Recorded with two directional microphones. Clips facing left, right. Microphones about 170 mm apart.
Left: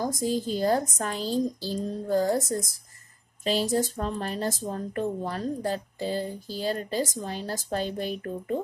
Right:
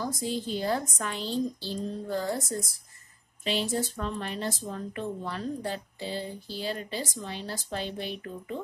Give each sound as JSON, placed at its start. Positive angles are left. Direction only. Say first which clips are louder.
{"t": 0.0, "sound": "speech", "louder": "left 4 dB", "side_deg": 45}